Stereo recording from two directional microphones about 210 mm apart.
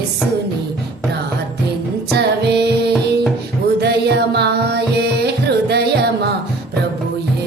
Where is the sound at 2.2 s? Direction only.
50° right (ahead or behind).